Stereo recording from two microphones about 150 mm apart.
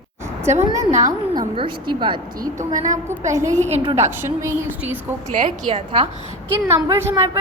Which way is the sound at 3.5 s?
50° right (ahead or behind).